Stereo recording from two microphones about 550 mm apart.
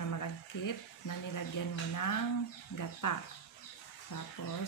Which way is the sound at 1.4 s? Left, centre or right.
Left.